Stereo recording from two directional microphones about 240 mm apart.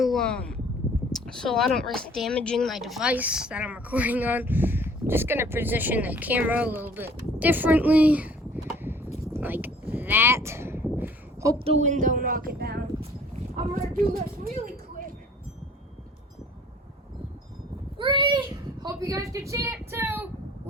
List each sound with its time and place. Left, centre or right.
0.0 s speech: centre
9.3 s a sound: centre
11.6 s speech: right
13.9 s speech: right
17.9 s a child's voice: right